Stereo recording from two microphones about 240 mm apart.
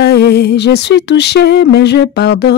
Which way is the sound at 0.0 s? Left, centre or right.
Left.